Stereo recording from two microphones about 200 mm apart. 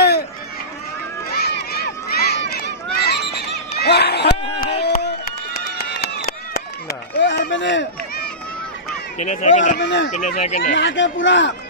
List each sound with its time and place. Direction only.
1.3 s run: 50° left (ahead or behind)
4.8 s a sound: 55° left (ahead or behind)
5.9 s run: 50° left (ahead or behind)
9.2 s speech: 35° left (ahead or behind)
9.8 s speech: 60° left (ahead or behind)
10.0 s speech: 35° left (ahead or behind)
10.8 s speech: 65° left (ahead or behind)